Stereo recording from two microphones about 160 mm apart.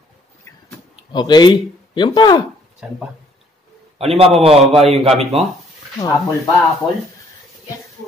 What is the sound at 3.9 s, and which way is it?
Speech, 40° right (ahead or behind).